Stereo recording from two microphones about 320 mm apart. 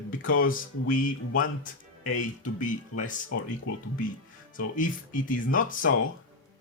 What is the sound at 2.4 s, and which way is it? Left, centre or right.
Speech, left.